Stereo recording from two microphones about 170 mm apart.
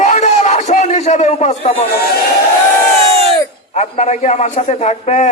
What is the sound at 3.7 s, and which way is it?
A man's voice, 40° left (ahead or behind).